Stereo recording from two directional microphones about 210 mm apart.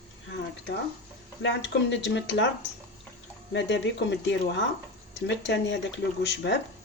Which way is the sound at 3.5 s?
60° left (ahead or behind).